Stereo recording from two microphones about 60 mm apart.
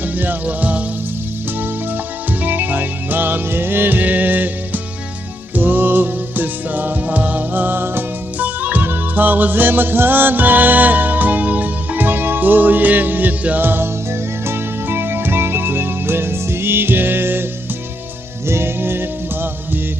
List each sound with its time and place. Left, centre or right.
0.0 s music: right
2.4 s music: right
18.4 s music: right